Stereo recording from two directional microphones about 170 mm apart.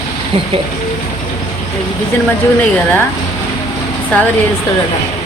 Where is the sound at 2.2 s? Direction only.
10° left (ahead or behind).